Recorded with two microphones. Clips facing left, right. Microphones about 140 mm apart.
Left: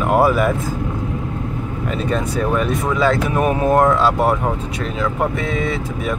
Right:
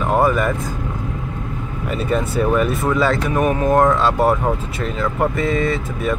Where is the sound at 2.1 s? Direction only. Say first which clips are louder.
Right 2 dB; 5° right (ahead or behind).